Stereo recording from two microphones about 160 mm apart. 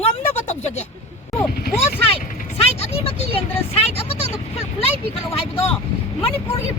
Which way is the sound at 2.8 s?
40° left (ahead or behind).